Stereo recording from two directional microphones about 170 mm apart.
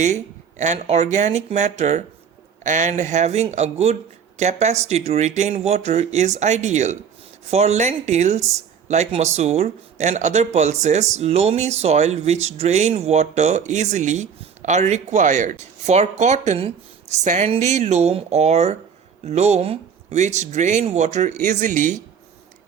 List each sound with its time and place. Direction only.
0.6 s speech: 40° right (ahead or behind)